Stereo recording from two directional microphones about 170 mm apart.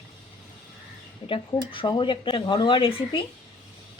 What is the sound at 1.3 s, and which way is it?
Speech, 30° left (ahead or behind).